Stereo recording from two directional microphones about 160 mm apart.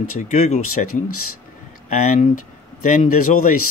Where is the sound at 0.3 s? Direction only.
50° left (ahead or behind).